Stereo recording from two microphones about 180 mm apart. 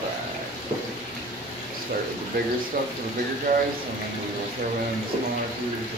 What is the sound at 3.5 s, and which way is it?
Speech, 55° right (ahead or behind).